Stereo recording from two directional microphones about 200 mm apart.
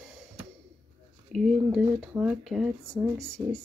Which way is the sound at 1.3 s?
Centre (ahead or behind).